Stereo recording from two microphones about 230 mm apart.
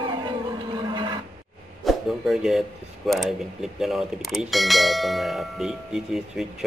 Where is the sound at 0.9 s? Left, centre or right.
Centre.